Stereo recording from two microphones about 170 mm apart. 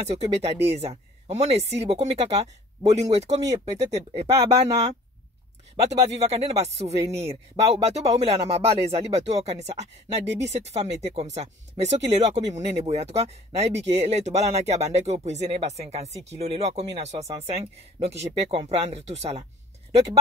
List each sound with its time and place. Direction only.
0.0 s speech: 40° right (ahead or behind)